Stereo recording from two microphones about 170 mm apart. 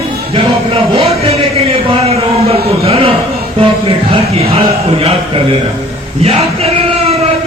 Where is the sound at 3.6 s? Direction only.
35° right (ahead or behind).